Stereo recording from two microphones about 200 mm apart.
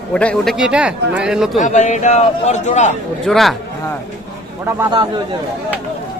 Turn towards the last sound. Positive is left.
turn(degrees=-20)  # may be behind; listen again after turning